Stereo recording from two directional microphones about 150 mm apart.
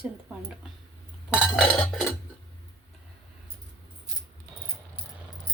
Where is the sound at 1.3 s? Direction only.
5° right (ahead or behind).